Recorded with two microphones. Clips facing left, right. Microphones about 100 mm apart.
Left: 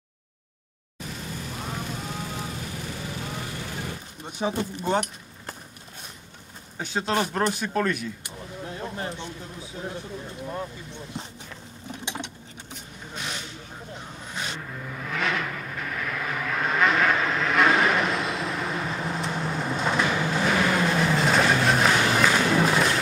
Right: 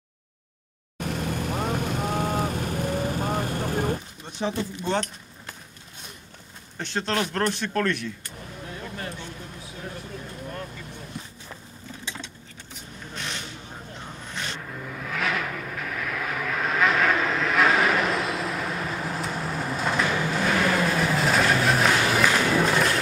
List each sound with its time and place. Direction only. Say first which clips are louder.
0.9 s vehicle: right 7 dB; 60° right (ahead or behind)
4.3 s speech: left 1 dB; 10° left (ahead or behind)
6.8 s speech: left 1 dB; 5° left (ahead or behind)
8.8 s a sound: left 3 dB; 25° left (ahead or behind)
11.1 s a sound: left 2 dB; 25° left (ahead or behind)
14.3 s vehicle: left 1 dB; 5° left (ahead or behind)